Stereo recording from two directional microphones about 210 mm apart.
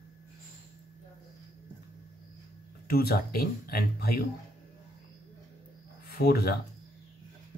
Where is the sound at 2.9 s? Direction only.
45° left (ahead or behind).